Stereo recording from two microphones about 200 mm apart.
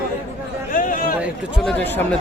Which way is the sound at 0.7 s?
40° left (ahead or behind).